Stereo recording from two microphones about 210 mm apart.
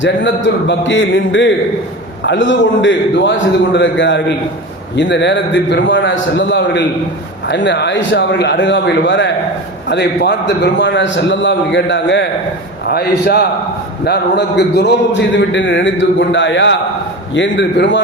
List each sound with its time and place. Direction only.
0.0 s a man's voice: 60° left (ahead or behind)